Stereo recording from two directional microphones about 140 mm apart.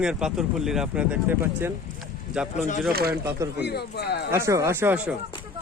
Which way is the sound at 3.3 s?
20° right (ahead or behind).